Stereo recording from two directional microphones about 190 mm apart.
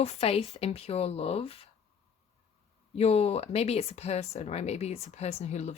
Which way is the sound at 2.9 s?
35° left (ahead or behind).